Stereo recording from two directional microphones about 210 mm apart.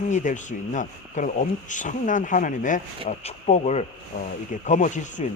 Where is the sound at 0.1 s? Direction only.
35° left (ahead or behind).